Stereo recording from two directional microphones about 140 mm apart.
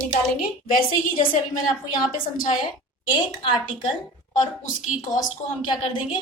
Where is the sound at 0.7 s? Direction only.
85° left.